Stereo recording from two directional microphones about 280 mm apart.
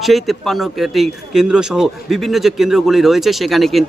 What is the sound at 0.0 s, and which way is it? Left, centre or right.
A man's voice, centre.